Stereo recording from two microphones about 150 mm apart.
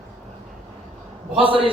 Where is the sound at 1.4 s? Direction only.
35° right (ahead or behind).